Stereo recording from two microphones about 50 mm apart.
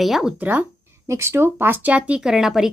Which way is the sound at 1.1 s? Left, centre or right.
Right.